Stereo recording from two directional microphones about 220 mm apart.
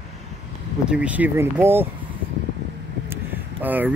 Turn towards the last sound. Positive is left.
turn(degrees=-10)  # may be behind; listen again after turning